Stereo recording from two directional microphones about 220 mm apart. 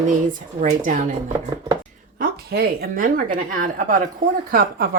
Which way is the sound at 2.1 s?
45° right (ahead or behind).